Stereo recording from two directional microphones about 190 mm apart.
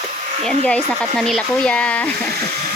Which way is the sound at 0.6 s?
5° left (ahead or behind).